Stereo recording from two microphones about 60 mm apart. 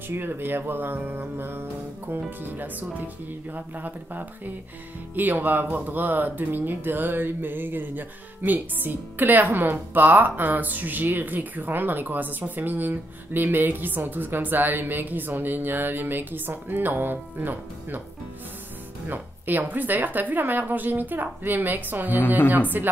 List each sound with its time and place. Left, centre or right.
0.1 s speech: right
19.0 s speech: right